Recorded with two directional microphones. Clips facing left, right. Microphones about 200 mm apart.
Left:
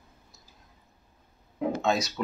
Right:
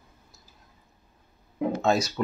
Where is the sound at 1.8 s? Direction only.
Centre (ahead or behind).